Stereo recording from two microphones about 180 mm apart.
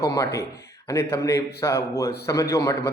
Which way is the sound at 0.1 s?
15° left (ahead or behind).